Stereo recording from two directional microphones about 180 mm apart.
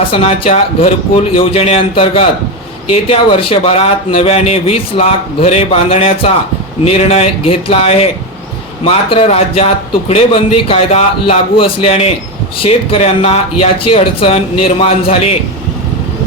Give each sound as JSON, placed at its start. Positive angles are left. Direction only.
{"t": 0.1, "sound": "a man's voice", "side_deg": 35}